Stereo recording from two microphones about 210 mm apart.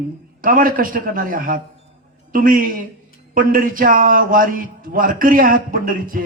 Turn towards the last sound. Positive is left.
turn(degrees=-40)  # may be behind; listen again after turning